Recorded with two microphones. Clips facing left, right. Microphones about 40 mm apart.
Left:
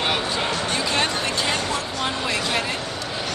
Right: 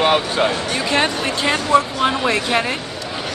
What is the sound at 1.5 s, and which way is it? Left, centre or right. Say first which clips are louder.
Speech: right 9 dB; right.